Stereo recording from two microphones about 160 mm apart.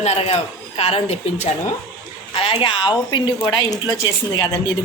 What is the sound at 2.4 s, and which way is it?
Speech, 35° left (ahead or behind).